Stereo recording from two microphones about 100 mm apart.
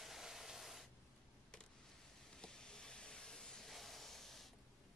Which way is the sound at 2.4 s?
5° left (ahead or behind).